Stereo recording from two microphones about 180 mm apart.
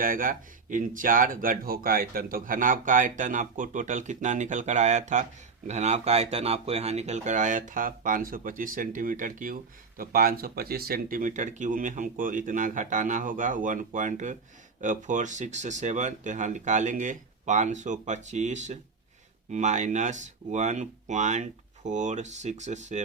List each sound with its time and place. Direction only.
0.0 s speech: 50° right (ahead or behind)